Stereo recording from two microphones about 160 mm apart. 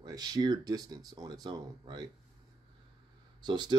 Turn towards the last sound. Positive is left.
turn(degrees=-25)  # may be behind; listen again after turning